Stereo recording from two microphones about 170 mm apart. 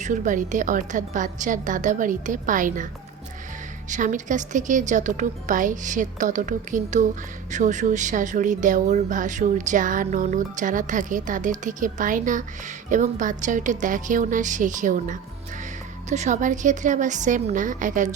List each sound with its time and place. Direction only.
0.0 s speech: 50° right (ahead or behind)
3.8 s speech: 50° right (ahead or behind)